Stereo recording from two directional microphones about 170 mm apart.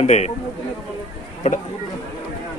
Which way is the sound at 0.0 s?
40° left (ahead or behind).